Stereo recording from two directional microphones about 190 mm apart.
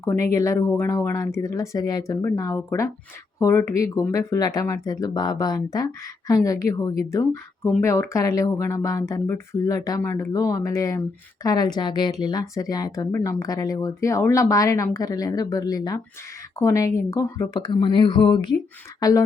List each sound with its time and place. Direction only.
0.0 s speech: 15° left (ahead or behind)